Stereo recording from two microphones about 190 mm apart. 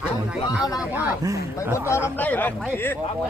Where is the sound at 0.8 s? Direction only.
10° right (ahead or behind).